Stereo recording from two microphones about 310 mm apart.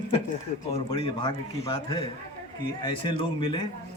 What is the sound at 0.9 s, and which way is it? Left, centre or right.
A man's voice, centre.